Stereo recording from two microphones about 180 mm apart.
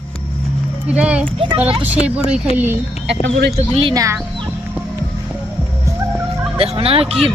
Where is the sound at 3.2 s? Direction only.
65° right (ahead or behind).